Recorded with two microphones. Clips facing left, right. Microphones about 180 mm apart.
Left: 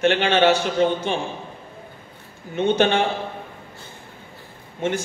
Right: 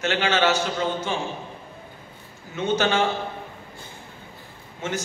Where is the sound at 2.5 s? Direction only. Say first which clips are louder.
Left 4 dB; 60° left (ahead or behind).